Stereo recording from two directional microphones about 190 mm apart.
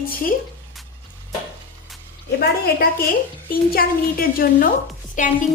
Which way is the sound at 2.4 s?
55° left (ahead or behind).